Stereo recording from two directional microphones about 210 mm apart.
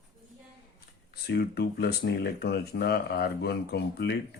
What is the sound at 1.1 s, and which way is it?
Speech, 50° left (ahead or behind).